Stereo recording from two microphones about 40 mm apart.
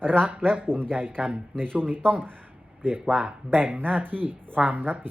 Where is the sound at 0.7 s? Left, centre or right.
Right.